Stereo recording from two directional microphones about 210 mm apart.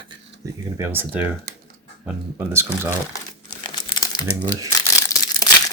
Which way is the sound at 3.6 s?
20° left (ahead or behind).